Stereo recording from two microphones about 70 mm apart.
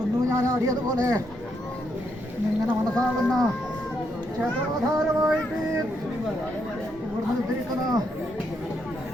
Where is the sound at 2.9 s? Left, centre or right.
Centre.